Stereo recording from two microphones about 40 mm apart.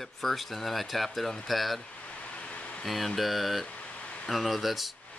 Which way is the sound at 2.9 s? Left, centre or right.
Centre.